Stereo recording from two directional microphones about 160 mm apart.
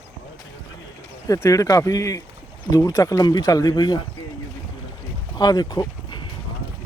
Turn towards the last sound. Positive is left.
turn(degrees=25)  # may be behind; listen again after turning